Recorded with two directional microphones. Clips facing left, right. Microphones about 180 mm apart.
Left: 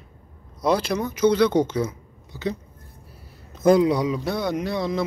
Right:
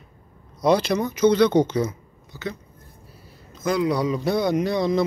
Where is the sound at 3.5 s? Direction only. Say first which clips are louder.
Left 7 dB; 50° left (ahead or behind).